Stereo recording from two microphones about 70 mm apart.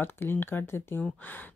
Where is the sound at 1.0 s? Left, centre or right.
Left.